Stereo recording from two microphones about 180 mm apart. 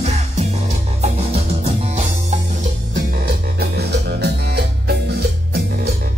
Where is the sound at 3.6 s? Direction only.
65° right (ahead or behind).